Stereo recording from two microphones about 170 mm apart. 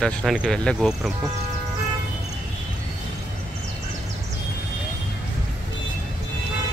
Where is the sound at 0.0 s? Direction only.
Centre (ahead or behind).